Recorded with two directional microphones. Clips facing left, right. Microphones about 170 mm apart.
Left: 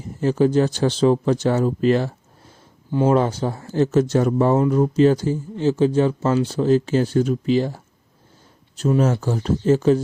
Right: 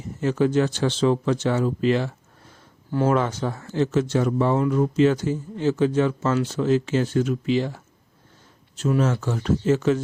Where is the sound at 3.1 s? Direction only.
30° left (ahead or behind).